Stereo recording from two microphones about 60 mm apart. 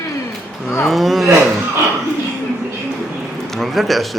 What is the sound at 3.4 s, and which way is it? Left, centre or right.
Speech, centre.